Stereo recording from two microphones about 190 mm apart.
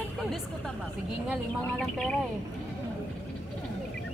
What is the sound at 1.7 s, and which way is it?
Speech, 5° left (ahead or behind).